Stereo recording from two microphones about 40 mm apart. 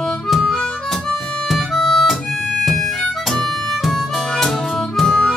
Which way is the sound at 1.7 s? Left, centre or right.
Centre.